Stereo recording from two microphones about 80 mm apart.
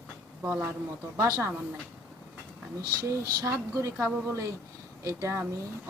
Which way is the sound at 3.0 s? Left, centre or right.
Right.